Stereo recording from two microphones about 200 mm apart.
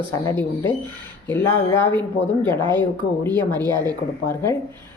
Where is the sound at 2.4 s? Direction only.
25° right (ahead or behind).